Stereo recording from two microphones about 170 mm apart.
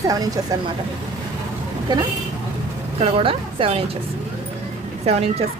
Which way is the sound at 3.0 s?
35° right (ahead or behind).